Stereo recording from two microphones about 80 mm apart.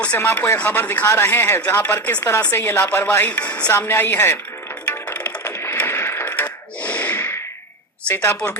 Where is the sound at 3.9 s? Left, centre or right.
Left.